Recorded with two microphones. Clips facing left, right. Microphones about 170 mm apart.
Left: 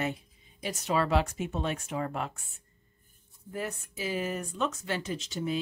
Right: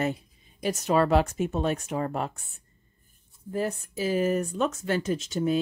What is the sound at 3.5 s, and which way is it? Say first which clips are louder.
Speech: right 7 dB; 35° right (ahead or behind).